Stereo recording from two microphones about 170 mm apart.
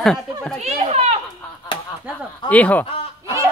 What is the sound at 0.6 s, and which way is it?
Children playing, 40° right (ahead or behind).